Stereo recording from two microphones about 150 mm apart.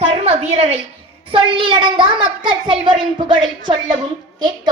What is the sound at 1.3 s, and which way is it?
A woman's voice, 35° right (ahead or behind).